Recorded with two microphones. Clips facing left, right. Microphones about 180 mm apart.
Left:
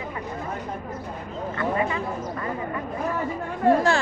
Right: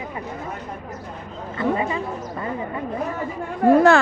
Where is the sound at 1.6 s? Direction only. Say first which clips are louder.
Right 3 dB; 25° right (ahead or behind).